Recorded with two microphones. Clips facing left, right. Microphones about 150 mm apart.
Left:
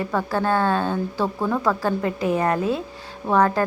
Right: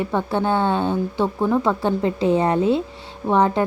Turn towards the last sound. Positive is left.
turn(degrees=-20)  # may be behind; listen again after turning